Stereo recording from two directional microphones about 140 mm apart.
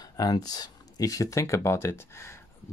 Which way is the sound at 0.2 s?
25° left (ahead or behind).